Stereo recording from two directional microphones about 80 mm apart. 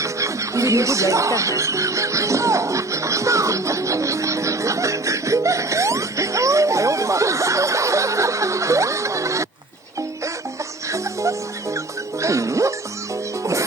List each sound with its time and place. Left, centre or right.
0.0 s music: right
10.9 s music: right